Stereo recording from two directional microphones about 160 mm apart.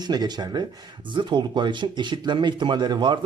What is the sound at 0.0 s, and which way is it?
Speech, 25° right (ahead or behind).